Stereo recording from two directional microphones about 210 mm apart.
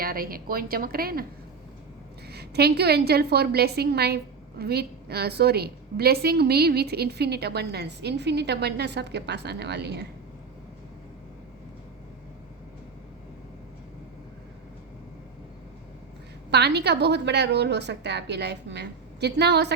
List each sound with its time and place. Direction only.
0.0 s a woman's voice: 45° right (ahead or behind)
2.2 s a woman's voice: 50° right (ahead or behind)
16.5 s a woman's voice: 50° right (ahead or behind)